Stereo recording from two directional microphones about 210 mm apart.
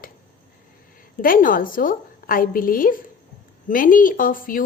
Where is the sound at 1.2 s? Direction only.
40° left (ahead or behind).